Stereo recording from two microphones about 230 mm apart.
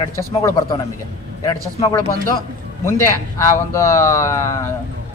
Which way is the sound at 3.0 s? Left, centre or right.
Centre.